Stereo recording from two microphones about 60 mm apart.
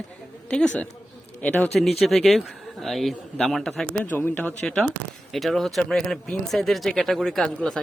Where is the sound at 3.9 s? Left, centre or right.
Left.